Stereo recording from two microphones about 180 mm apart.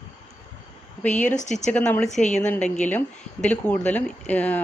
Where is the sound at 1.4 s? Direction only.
40° left (ahead or behind).